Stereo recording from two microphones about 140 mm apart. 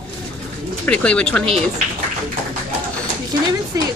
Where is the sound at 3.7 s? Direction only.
25° right (ahead or behind).